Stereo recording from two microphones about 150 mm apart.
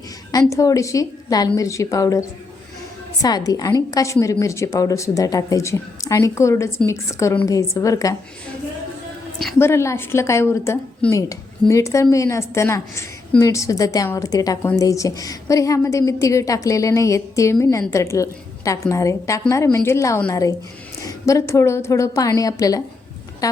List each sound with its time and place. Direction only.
0.3 s a woman's voice: 25° left (ahead or behind)
9.6 s a woman's voice: 15° left (ahead or behind)